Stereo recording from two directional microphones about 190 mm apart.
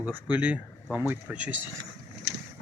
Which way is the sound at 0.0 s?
10° right (ahead or behind).